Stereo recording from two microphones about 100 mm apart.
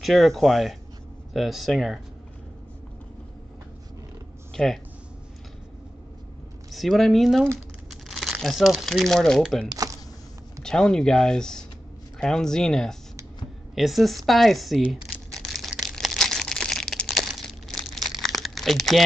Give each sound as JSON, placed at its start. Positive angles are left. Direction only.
{"t": 0.0, "sound": "speech", "side_deg": 0}
{"t": 4.6, "sound": "speech", "side_deg": 5}
{"t": 6.7, "sound": "speech", "side_deg": 0}
{"t": 9.7, "sound": "speech", "side_deg": -40}
{"t": 10.6, "sound": "speech", "side_deg": 5}
{"t": 13.7, "sound": "crumpling", "side_deg": 0}